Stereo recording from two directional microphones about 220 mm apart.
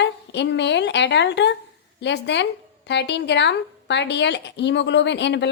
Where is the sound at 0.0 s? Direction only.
50° left (ahead or behind).